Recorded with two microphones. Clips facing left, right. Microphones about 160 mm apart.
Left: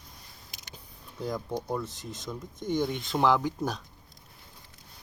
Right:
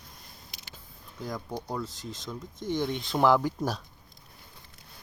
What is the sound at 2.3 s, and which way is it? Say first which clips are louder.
Speech: left 1 dB; 5° left (ahead or behind).